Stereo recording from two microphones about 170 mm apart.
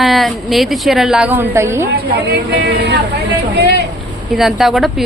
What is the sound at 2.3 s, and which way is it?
Speech, 75° right (ahead or behind).